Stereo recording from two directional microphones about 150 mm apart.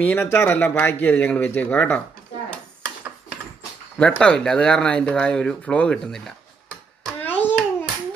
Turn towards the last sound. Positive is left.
turn(degrees=10)  # may be behind; listen again after turning